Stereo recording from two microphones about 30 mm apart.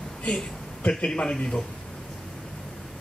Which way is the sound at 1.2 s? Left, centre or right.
Left.